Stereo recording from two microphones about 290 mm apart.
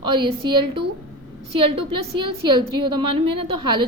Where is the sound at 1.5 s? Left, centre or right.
Centre.